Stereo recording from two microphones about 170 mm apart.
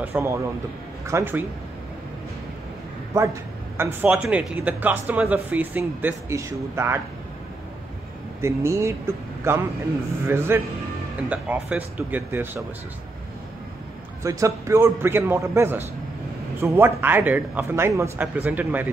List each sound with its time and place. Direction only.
0.0 s speech: 10° right (ahead or behind)
3.7 s speech: 10° right (ahead or behind)
8.4 s speech: 15° right (ahead or behind)
14.2 s speech: 20° right (ahead or behind)